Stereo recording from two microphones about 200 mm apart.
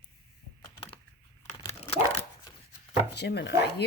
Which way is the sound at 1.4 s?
35° left (ahead or behind).